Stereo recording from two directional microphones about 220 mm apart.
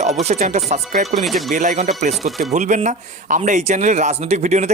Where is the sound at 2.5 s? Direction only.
35° right (ahead or behind).